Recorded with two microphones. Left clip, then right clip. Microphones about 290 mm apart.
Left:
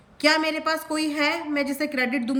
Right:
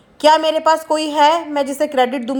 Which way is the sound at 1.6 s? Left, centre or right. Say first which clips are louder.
Right 8 dB; centre.